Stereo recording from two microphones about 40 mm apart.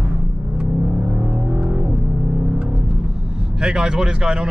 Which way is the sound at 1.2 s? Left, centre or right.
Right.